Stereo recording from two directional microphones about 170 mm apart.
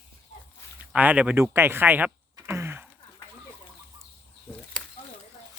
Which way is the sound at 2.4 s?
15° right (ahead or behind).